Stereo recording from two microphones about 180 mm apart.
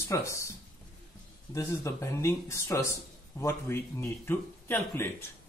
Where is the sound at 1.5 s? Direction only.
15° left (ahead or behind).